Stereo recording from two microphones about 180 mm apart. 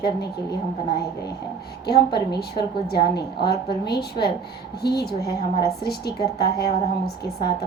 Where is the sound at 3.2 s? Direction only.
65° left (ahead or behind).